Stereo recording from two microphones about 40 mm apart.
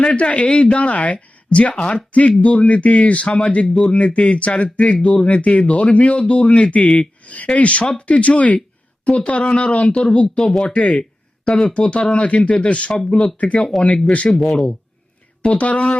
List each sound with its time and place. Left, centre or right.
0.0 s speech: left
10.3 s speech: centre
10.6 s speech: left